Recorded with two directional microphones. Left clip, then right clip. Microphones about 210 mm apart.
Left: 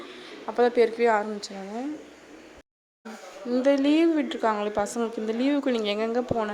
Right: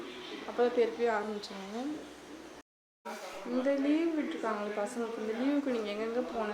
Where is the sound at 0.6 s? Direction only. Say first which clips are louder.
Left 8 dB; 40° left (ahead or behind).